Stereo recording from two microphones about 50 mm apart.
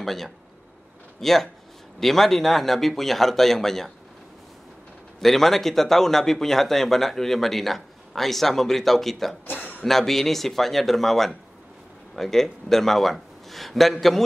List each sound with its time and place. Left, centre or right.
0.0 s speech: centre
5.2 s speech: centre
9.5 s a sound: left
9.8 s speech: centre